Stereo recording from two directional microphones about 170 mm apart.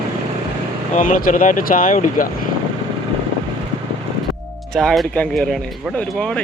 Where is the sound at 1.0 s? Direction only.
50° left (ahead or behind).